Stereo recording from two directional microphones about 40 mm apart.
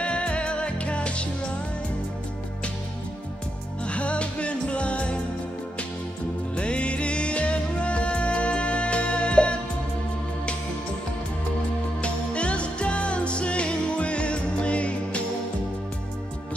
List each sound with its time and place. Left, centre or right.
0.0 s music: left
3.8 s music: left
6.5 s music: left
12.0 s music: left